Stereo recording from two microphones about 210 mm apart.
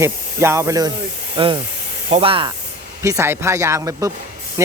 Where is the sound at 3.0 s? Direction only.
15° right (ahead or behind).